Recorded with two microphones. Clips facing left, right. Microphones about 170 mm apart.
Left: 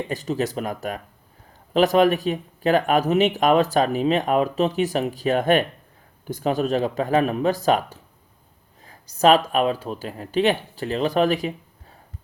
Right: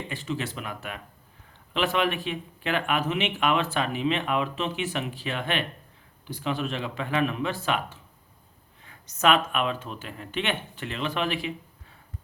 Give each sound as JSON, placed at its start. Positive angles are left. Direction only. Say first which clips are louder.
{"t": 0.1, "sound": "speech", "louder": "left 6 dB", "side_deg": 40}